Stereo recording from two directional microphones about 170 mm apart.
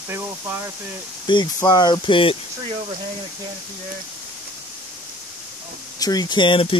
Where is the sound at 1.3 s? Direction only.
25° left (ahead or behind).